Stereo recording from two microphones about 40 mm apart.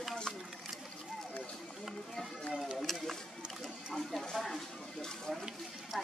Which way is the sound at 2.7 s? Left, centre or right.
Centre.